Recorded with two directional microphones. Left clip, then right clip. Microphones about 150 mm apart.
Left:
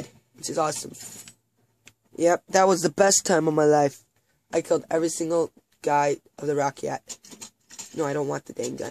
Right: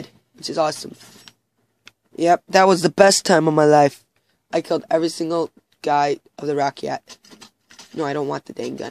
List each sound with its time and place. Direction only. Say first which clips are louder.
0.0 s a sound: right 4 dB; 35° right (ahead or behind)
2.1 s speech: right 5 dB; 35° right (ahead or behind)
7.1 s filing: left 1 dB; centre (ahead or behind)
8.0 s speech: right 3 dB; 35° right (ahead or behind)